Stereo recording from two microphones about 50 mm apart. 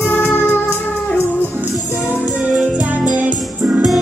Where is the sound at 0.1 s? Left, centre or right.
Left.